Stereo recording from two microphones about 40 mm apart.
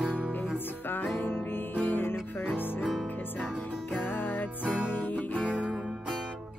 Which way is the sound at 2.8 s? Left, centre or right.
Centre.